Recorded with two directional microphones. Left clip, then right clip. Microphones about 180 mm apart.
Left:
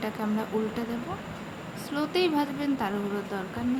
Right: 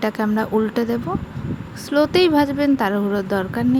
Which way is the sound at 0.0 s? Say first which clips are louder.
Right 10 dB; 45° right (ahead or behind).